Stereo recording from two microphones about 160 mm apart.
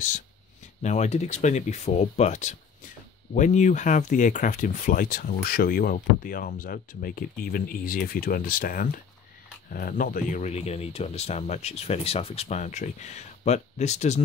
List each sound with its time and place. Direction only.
0.8 s speech: 45° left (ahead or behind)